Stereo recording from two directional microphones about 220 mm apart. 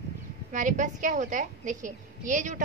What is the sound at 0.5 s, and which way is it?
A woman's voice, 35° right (ahead or behind).